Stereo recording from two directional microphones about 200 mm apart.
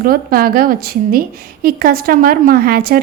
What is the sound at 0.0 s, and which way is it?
A woman's voice, 45° right (ahead or behind).